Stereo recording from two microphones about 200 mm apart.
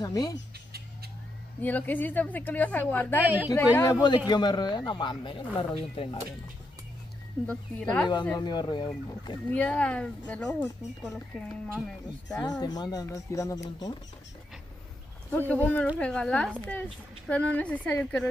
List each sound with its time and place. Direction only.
0.0 s speech: 20° left (ahead or behind)
1.6 s speech: 10° left (ahead or behind)
3.2 s speech: 10° right (ahead or behind)
3.4 s speech: 15° left (ahead or behind)
7.4 s speech: 5° left (ahead or behind)
8.4 s speech: 20° left (ahead or behind)
9.5 s speech: 5° left (ahead or behind)
12.3 s speech: 20° left (ahead or behind)
15.3 s speech: 10° left (ahead or behind)